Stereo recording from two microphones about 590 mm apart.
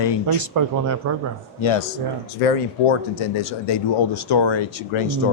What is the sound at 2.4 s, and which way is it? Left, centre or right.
Speech, left.